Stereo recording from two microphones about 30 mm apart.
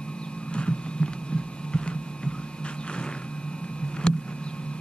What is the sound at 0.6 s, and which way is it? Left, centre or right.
Hum, left.